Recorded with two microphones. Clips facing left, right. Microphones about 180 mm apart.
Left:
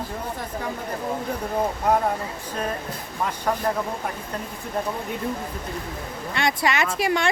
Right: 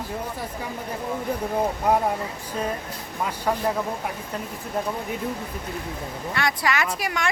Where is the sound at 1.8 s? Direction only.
10° right (ahead or behind).